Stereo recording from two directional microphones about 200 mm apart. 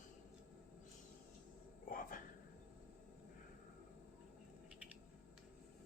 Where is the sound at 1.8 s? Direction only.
45° left (ahead or behind).